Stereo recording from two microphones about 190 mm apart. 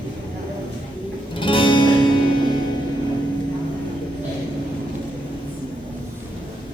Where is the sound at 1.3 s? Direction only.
25° left (ahead or behind).